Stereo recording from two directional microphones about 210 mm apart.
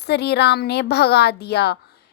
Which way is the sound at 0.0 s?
50° left (ahead or behind).